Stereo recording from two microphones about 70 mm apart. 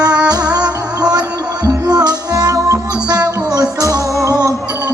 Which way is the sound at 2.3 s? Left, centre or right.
Right.